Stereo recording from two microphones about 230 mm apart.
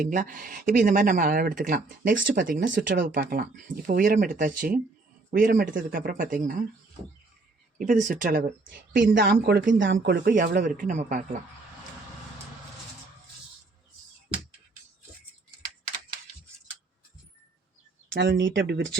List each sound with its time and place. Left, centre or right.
0.1 s speech: right
2.1 s speech: right
2.4 s speech: right
7.8 s speech: right
8.6 s speech: right
18.1 s speech: right